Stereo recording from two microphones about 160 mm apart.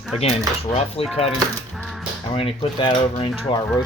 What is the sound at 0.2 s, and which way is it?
Speech, 40° left (ahead or behind).